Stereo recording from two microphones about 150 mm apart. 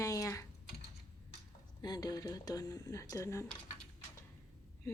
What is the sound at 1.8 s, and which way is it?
Speech, 25° left (ahead or behind).